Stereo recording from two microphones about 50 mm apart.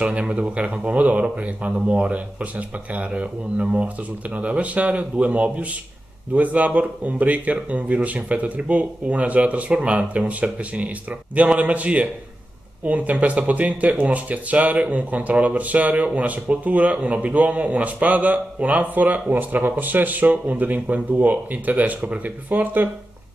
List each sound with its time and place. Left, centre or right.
0.0 s speech: right